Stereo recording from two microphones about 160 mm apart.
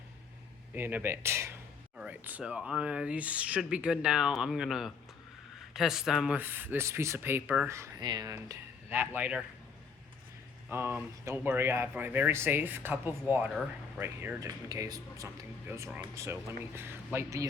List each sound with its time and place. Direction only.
0.7 s speech: 10° right (ahead or behind)
7.7 s speech: 20° right (ahead or behind)
10.7 s speech: 15° right (ahead or behind)